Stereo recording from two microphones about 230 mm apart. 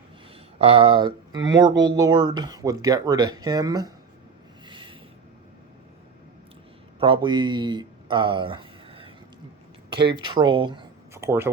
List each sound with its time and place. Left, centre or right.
0.6 s speech: right
4.6 s a sound: right
7.0 s speech: right
10.2 s speech: centre